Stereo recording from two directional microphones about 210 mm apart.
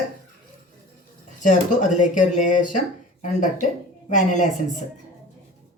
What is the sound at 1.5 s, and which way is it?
Speech, 35° left (ahead or behind).